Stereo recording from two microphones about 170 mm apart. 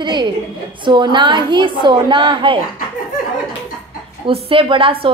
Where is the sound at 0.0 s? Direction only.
25° right (ahead or behind).